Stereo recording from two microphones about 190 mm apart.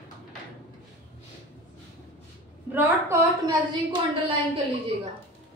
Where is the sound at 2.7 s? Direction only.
10° right (ahead or behind).